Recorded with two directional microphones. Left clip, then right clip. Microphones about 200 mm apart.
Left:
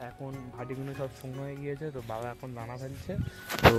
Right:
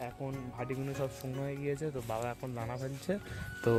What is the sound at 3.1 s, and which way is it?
Speech, 40° right (ahead or behind).